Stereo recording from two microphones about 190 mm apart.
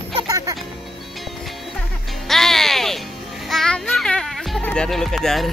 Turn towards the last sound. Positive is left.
turn(degrees=0)  # may be behind; listen again after turning